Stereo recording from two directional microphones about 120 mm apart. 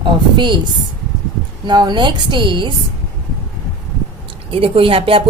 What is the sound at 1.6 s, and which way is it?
A woman's voice, 40° right (ahead or behind).